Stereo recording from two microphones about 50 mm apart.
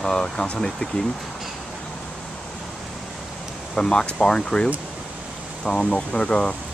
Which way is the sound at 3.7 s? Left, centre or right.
Centre.